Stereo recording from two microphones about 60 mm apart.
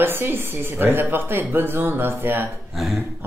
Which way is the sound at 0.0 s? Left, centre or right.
Right.